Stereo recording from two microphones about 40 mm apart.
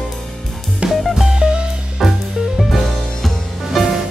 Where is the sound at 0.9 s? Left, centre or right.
Centre.